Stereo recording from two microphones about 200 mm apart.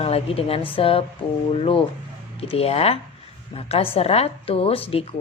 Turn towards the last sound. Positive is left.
turn(degrees=30)  # may be behind; listen again after turning